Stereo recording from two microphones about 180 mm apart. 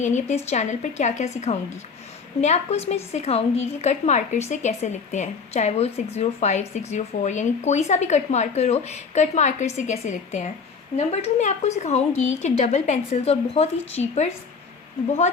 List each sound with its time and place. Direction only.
0.0 s speech: 40° left (ahead or behind)